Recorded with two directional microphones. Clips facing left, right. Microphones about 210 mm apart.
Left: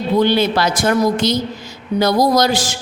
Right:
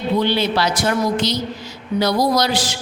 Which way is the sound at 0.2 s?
50° left (ahead or behind).